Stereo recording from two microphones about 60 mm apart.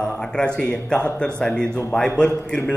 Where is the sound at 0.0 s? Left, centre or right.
Centre.